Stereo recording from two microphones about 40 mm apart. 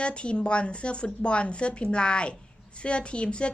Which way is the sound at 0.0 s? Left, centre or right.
Left.